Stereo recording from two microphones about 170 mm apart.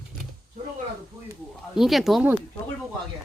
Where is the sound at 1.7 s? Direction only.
Centre (ahead or behind).